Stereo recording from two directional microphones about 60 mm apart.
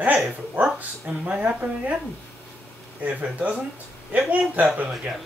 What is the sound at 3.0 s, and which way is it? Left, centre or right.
Speech, right.